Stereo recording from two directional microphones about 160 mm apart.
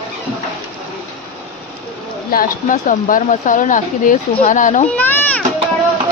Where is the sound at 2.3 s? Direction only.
60° left (ahead or behind).